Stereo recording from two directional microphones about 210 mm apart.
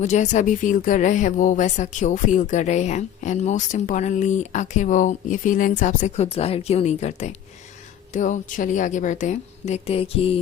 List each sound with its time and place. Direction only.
0.0 s speech: 35° left (ahead or behind)